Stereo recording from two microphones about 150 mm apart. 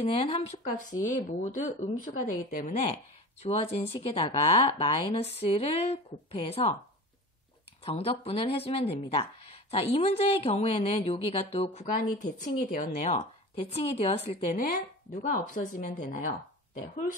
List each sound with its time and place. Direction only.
0.0 s speech: 40° left (ahead or behind)
0.7 s a woman's voice: 60° left (ahead or behind)
3.4 s speech: 40° left (ahead or behind)
7.8 s speech: 40° left (ahead or behind)
11.8 s speech: 60° left (ahead or behind); by 14.6 s 45° left (ahead or behind)
15.2 s a woman's voice: 60° left (ahead or behind)